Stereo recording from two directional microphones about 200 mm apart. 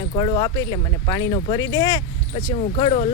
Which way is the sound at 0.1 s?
20° left (ahead or behind).